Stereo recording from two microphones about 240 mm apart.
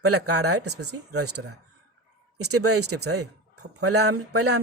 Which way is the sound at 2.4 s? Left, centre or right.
Right.